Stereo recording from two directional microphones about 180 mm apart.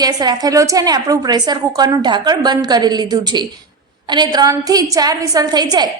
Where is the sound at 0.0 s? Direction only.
20° right (ahead or behind).